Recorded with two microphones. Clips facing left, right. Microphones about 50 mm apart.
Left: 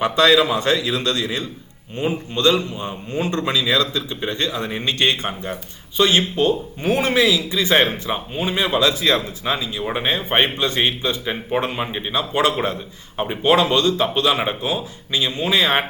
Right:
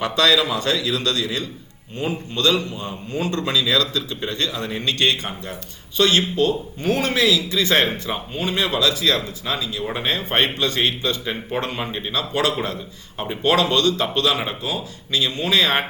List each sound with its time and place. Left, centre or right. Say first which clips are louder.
0.0 s a man's voice: left 3 dB; left